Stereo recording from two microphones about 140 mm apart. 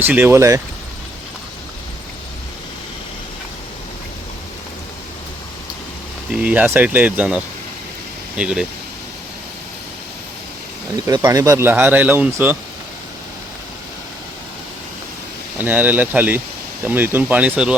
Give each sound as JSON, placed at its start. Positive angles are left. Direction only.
{"t": 0.0, "sound": "speech", "side_deg": -15}
{"t": 6.3, "sound": "speech", "side_deg": -10}
{"t": 11.0, "sound": "speech", "side_deg": -25}
{"t": 15.5, "sound": "speech", "side_deg": -10}